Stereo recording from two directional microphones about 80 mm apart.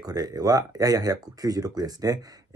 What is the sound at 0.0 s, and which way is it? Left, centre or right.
Speech, right.